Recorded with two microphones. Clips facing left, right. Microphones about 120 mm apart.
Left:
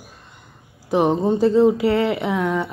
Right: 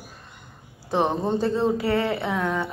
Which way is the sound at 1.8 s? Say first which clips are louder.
Left 5 dB; 20° left (ahead or behind).